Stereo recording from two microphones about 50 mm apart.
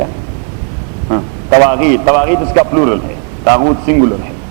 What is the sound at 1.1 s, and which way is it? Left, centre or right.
A man's voice, centre.